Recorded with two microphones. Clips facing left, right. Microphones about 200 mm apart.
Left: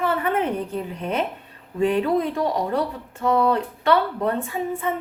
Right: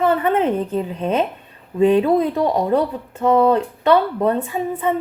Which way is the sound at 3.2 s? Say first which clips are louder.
Right 5 dB; 20° right (ahead or behind).